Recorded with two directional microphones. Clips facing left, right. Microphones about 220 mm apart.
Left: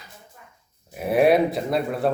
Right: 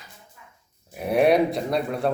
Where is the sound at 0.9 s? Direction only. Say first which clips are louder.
Left 1 dB; centre (ahead or behind).